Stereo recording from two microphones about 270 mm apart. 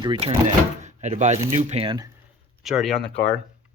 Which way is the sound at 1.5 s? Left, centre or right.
Right.